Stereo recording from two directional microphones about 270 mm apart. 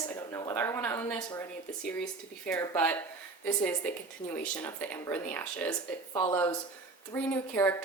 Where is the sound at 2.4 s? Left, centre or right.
Centre.